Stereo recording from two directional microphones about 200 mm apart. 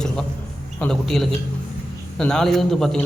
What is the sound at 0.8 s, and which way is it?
A man's voice, centre (ahead or behind).